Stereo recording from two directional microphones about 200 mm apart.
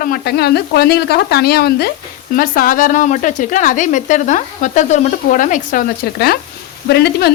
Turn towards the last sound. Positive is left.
turn(degrees=50)  # may be behind; listen again after turning